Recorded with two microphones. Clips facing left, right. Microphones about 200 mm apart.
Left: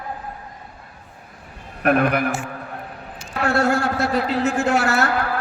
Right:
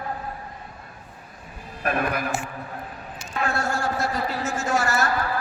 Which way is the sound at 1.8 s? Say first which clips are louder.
Left 7 dB; 65° left (ahead or behind).